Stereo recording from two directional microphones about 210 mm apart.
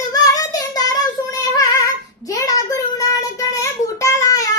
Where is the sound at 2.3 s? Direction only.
15° left (ahead or behind).